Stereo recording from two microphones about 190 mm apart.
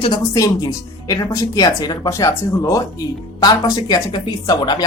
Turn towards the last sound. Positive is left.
turn(degrees=20)  # may be behind; listen again after turning